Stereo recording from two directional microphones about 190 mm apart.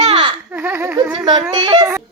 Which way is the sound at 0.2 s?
20° right (ahead or behind).